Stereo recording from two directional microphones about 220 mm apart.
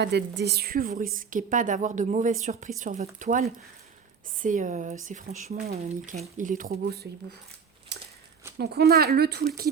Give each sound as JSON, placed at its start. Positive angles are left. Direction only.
{"t": 0.0, "sound": "a woman's voice", "side_deg": -50}
{"t": 8.5, "sound": "speech", "side_deg": -45}